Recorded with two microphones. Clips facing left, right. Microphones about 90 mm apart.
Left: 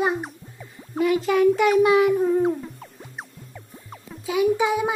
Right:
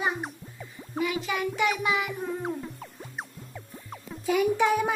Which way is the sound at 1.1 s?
40° left (ahead or behind).